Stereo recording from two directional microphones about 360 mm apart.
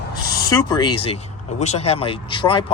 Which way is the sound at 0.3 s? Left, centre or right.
Centre.